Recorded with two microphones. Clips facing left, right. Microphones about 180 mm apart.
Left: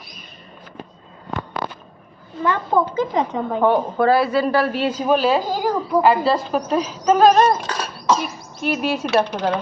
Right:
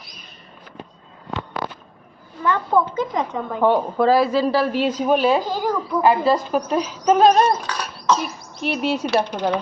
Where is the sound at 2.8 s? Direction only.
25° left (ahead or behind).